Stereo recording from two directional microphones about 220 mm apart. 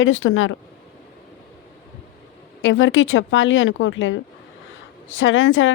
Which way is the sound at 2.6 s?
60° left (ahead or behind).